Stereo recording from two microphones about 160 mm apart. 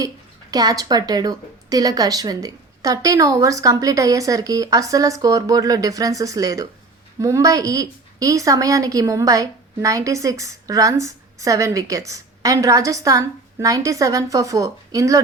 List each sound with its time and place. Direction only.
0.5 s a woman's voice: 25° right (ahead or behind)